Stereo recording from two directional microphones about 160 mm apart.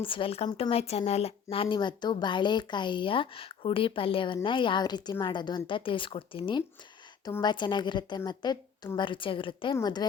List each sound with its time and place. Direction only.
0.0 s a woman's voice: 35° left (ahead or behind)